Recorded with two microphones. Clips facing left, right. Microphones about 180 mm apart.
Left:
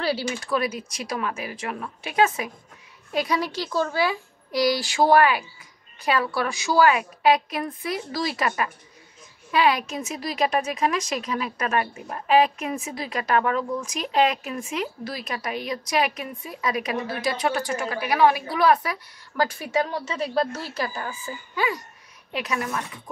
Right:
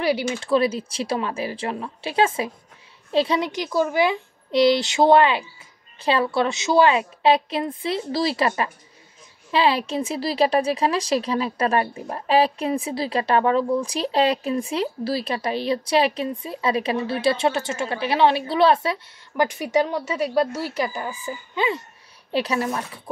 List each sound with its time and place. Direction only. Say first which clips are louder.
0.0 s a woman's voice: right 4 dB; 20° right (ahead or behind)